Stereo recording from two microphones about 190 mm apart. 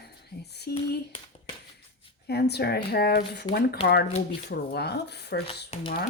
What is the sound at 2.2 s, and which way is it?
Speech, 60° left (ahead or behind).